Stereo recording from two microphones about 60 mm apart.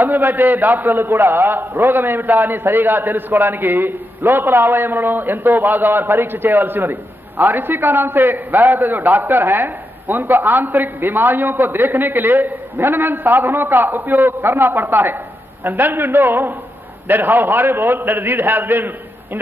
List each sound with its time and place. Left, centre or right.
0.0 s a man's voice: right
8.5 s a man's voice: right
8.8 s a man's voice: right